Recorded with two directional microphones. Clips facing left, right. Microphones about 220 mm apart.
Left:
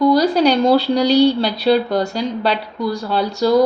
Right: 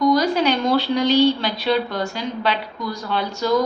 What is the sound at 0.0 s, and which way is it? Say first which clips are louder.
Speech: left 4 dB; 35° left (ahead or behind).